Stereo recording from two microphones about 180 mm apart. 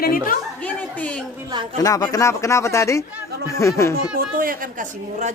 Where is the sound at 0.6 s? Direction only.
10° left (ahead or behind).